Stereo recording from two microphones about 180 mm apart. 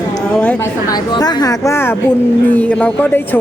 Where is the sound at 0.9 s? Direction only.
20° left (ahead or behind).